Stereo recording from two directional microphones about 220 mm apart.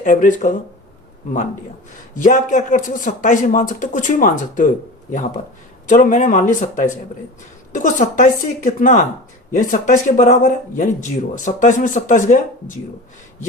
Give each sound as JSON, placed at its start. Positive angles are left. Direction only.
{"t": 0.0, "sound": "speech", "side_deg": 35}
{"t": 2.1, "sound": "speech", "side_deg": 35}
{"t": 5.9, "sound": "speech", "side_deg": 35}